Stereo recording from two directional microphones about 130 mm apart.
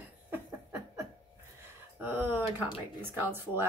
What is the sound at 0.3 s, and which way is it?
Laughter, 15° right (ahead or behind).